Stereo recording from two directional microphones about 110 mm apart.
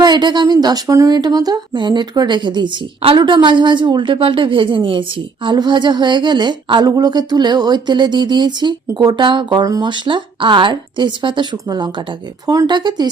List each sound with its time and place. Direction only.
0.0 s speech: 40° right (ahead or behind)
9.6 s speech: 30° right (ahead or behind)
9.9 s speech: 45° right (ahead or behind)